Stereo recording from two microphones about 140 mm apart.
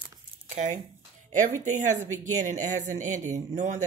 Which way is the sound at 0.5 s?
55° right (ahead or behind).